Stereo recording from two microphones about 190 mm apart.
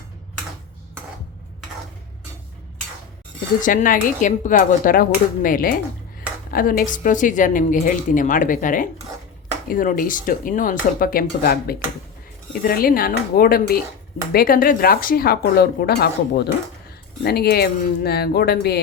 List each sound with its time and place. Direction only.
3.6 s a woman's voice: 45° left (ahead or behind)